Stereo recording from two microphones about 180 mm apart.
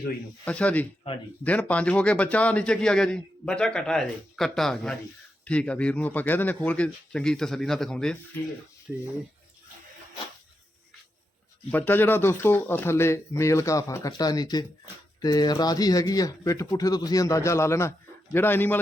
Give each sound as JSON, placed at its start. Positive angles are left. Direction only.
{"t": 0.4, "sound": "a man's voice", "side_deg": 5}
{"t": 11.7, "sound": "speech", "side_deg": 10}